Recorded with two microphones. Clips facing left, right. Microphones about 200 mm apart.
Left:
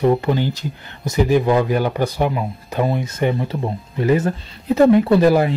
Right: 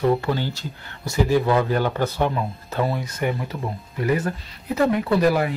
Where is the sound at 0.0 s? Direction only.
20° left (ahead or behind).